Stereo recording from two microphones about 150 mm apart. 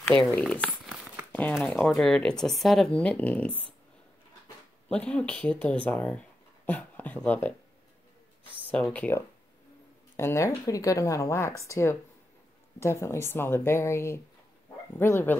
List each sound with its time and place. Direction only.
0.3 s speech: 10° left (ahead or behind)
4.8 s speech: 5° left (ahead or behind)
8.7 s speech: 5° left (ahead or behind)